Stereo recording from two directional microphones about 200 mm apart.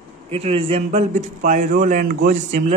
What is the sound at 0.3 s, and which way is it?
A man's voice, 30° right (ahead or behind).